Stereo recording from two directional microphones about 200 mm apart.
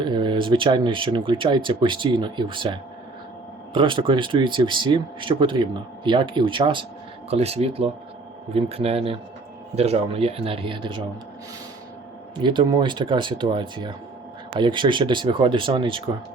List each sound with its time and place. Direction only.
0.0 s speech: 25° right (ahead or behind)
3.8 s speech: 25° right (ahead or behind)
12.4 s speech: 25° right (ahead or behind)